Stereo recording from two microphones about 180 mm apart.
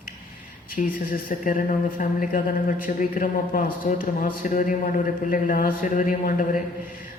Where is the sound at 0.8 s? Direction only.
50° left (ahead or behind).